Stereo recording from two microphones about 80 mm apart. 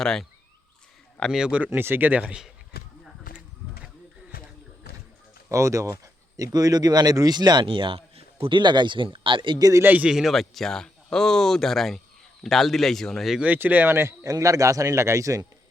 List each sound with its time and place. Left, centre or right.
0.0 s speech: centre
1.3 s a man's voice: centre
5.5 s speech: right
9.6 s speech: right
9.8 s speech: right
10.1 s speech: centre
13.4 s speech: right
14.3 s speech: right